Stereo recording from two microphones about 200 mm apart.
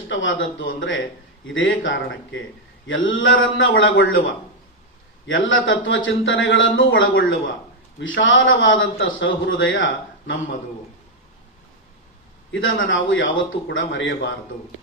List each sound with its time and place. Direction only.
0.1 s speech: 70° left (ahead or behind)
5.2 s speech: 75° left (ahead or behind)
12.5 s speech: 75° left (ahead or behind)